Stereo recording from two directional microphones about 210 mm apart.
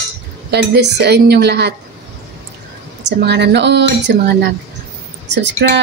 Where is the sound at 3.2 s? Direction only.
55° right (ahead or behind).